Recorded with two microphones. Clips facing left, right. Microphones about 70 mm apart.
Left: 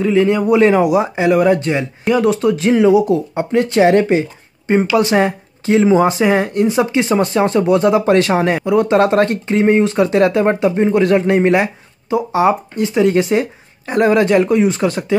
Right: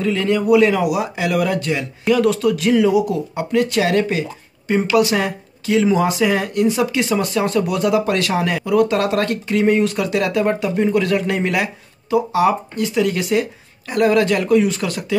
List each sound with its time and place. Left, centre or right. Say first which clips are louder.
0.0 s speech: left 5 dB; centre